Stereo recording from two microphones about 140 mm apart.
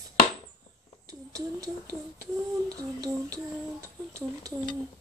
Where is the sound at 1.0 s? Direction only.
25° right (ahead or behind).